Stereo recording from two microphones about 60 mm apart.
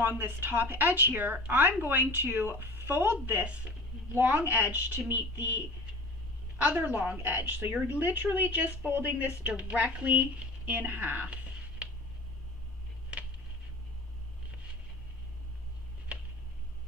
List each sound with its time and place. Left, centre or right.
0.0 s speech: right
3.4 s a woman's voice: centre
6.6 s a woman's voice: right